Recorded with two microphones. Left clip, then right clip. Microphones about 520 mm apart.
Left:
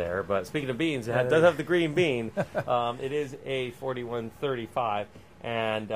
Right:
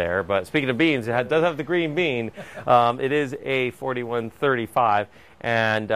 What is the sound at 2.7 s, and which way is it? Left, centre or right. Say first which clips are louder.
Speech: right 14 dB; right.